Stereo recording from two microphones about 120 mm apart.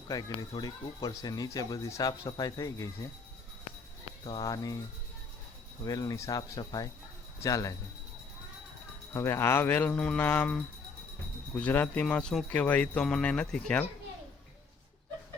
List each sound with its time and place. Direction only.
0.1 s speech: 35° left (ahead or behind)
4.3 s speech: 35° left (ahead or behind)
5.8 s speech: 35° left (ahead or behind)
9.1 s speech: 20° left (ahead or behind)